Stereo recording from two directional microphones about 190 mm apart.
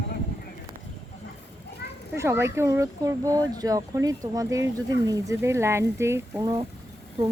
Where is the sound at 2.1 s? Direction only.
15° right (ahead or behind).